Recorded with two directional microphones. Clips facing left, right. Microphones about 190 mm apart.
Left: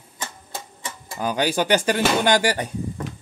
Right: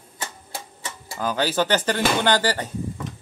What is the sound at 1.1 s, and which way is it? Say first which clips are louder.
Speech: left 1 dB; 15° left (ahead or behind).